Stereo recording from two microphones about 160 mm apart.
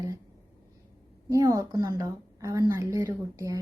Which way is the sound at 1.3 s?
20° right (ahead or behind).